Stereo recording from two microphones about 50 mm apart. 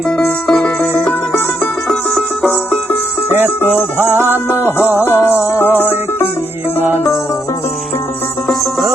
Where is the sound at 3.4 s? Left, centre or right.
Right.